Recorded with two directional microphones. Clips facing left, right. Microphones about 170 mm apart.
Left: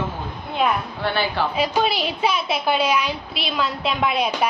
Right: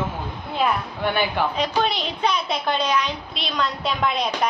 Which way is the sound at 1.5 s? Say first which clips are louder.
Left 2 dB; 5° left (ahead or behind).